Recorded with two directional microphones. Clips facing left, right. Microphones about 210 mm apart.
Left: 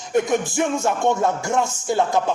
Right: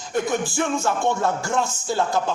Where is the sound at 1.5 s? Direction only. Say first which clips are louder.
Left 2 dB; 25° left (ahead or behind).